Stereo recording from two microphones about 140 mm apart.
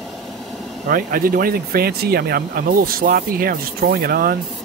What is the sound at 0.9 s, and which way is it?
Speech, 85° right.